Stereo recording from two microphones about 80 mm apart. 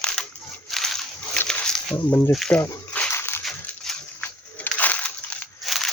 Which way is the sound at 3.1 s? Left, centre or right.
Left.